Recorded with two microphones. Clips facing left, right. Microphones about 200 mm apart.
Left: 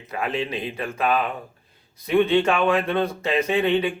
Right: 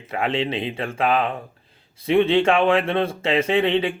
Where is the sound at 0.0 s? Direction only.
25° right (ahead or behind).